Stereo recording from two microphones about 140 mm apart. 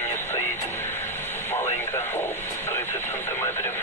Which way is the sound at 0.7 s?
15° left (ahead or behind).